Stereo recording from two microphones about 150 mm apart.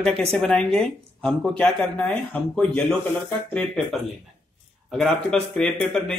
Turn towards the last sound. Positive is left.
turn(degrees=5)  # may be behind; listen again after turning